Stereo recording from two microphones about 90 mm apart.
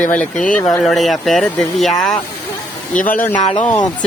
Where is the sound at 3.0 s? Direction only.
20° left (ahead or behind).